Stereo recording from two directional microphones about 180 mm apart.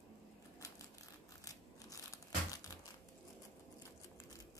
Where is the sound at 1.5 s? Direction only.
20° left (ahead or behind).